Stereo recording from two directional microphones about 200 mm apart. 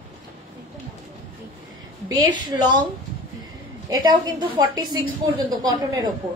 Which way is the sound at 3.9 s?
20° right (ahead or behind).